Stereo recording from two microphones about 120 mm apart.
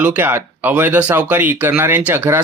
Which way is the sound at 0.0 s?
15° right (ahead or behind).